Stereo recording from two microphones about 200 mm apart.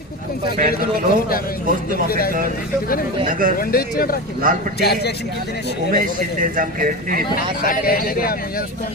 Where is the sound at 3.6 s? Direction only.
50° left (ahead or behind).